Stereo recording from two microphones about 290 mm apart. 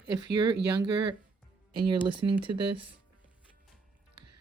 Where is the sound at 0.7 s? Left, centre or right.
Centre.